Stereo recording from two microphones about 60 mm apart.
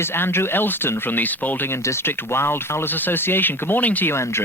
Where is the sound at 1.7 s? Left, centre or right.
Left.